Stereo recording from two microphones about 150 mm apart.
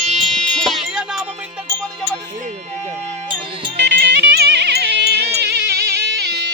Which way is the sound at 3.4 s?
35° right (ahead or behind).